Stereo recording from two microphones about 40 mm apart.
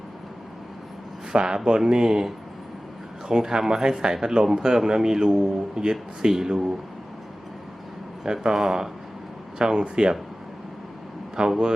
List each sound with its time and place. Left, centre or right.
1.3 s speech: centre
8.2 s speech: centre
11.3 s speech: centre